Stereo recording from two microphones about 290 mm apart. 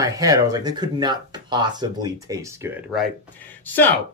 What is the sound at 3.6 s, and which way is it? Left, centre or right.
Speech, centre.